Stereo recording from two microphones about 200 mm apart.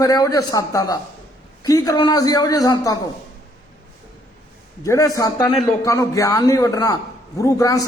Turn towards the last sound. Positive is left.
turn(degrees=15)  # may be behind; listen again after turning